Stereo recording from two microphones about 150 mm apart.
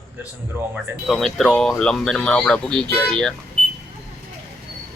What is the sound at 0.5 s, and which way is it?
Speech, 15° right (ahead or behind).